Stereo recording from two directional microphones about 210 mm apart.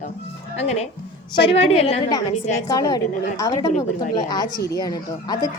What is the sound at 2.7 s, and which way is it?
A woman's voice, 20° left (ahead or behind).